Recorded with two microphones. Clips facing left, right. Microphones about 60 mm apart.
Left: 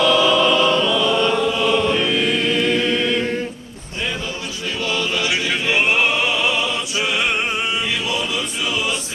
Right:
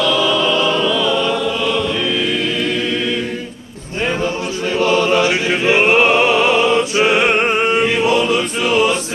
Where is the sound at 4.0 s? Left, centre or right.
Right.